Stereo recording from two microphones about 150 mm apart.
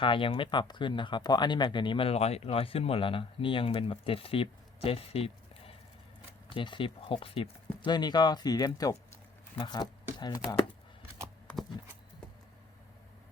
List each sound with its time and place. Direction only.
0.0 s speech: 35° left (ahead or behind)